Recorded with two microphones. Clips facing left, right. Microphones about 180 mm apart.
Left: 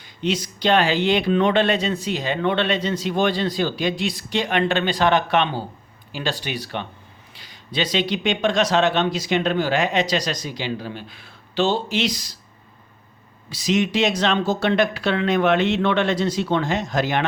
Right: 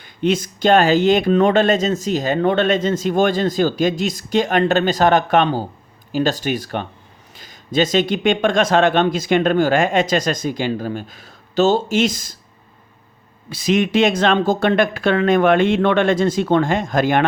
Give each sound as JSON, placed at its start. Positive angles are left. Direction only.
{"t": 0.0, "sound": "speech", "side_deg": -50}
{"t": 13.5, "sound": "speech", "side_deg": -55}